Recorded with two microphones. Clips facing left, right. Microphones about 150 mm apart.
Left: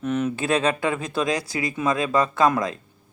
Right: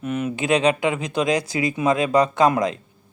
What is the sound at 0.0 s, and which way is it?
Speech, 5° right (ahead or behind).